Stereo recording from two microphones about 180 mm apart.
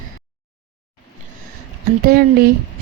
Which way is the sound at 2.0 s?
55° right (ahead or behind).